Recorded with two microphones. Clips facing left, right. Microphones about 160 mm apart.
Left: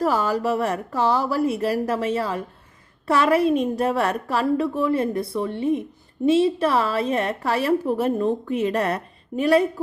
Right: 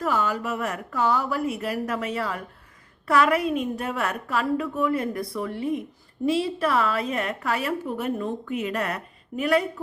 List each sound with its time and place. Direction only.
0.0 s a woman's voice: 35° left (ahead or behind)